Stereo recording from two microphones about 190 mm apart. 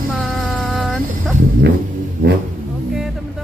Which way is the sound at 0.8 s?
Centre (ahead or behind).